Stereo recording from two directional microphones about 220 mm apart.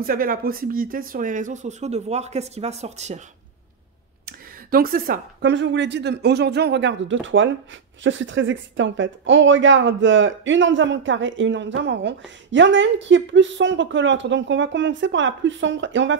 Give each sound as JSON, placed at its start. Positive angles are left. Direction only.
{"t": 0.0, "sound": "speech", "side_deg": -40}
{"t": 4.3, "sound": "speech", "side_deg": -40}